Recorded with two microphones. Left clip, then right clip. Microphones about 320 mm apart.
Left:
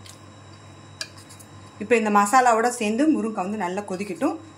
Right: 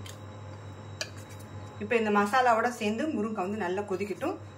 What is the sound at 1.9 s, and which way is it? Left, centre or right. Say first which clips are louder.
A woman's voice: left 8 dB; centre.